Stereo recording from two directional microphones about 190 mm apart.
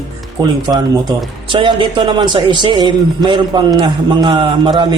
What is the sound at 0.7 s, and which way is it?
Speech, 25° right (ahead or behind).